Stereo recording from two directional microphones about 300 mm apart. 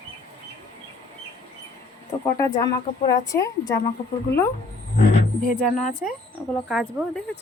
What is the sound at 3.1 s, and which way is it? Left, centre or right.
Speech, centre.